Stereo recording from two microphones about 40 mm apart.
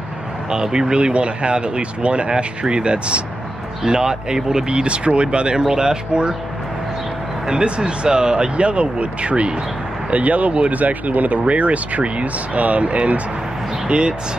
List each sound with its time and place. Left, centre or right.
0.5 s speech: centre
7.4 s speech: right